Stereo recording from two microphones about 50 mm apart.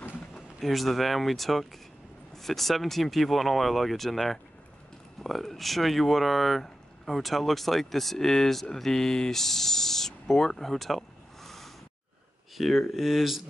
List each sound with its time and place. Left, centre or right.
0.6 s speech: centre